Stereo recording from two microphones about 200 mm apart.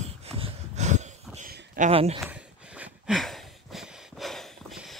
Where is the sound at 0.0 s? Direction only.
30° right (ahead or behind).